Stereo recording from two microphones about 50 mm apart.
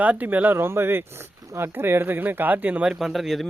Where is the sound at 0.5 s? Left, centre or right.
Right.